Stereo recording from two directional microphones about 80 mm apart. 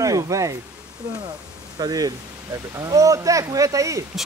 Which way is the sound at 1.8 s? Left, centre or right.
Right.